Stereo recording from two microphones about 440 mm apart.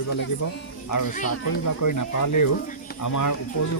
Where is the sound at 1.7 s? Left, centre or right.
Left.